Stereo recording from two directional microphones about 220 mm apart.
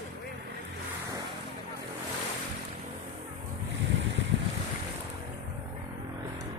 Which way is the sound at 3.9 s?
55° right (ahead or behind).